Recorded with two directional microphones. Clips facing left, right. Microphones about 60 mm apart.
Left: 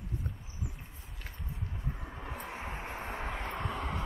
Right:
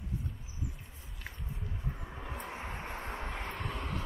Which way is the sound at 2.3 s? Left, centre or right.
Centre.